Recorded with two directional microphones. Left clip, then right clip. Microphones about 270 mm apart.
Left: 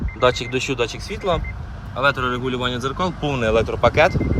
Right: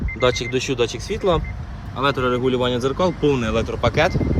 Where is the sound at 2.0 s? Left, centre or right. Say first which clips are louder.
Even; centre.